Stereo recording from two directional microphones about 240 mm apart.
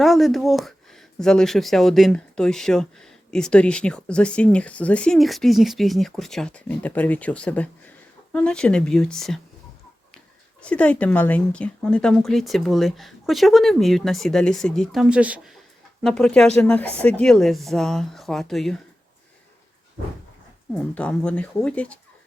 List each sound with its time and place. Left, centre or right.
0.0 s speech: centre
10.6 s speech: centre
20.7 s speech: centre